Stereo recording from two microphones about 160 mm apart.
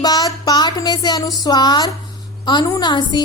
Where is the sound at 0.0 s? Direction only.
25° left (ahead or behind).